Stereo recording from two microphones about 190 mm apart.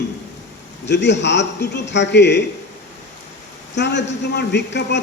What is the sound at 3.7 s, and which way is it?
A man's voice, 65° left (ahead or behind).